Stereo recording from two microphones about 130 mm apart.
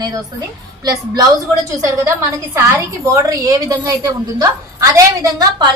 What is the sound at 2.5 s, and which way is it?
A woman's voice, 20° right (ahead or behind).